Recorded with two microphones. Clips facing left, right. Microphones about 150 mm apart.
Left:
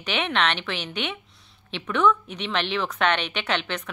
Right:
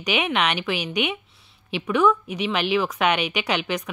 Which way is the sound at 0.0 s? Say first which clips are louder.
Right 2 dB; 10° right (ahead or behind).